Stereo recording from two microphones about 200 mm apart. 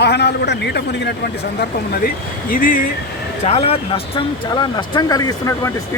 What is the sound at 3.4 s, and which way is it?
Speech, 30° left (ahead or behind).